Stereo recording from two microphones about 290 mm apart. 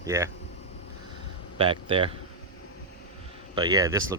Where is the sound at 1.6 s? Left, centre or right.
Centre.